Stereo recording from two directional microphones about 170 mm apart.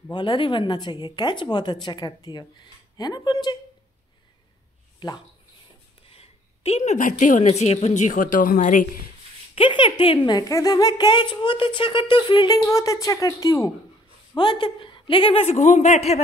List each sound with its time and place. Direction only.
0.1 s a woman's voice: 30° left (ahead or behind)
5.0 s a woman's voice: 25° left (ahead or behind); by 8.8 s 50° left (ahead or behind)
9.6 s a woman's voice: 30° left (ahead or behind)